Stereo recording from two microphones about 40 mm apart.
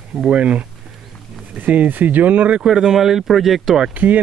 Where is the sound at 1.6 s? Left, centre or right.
Right.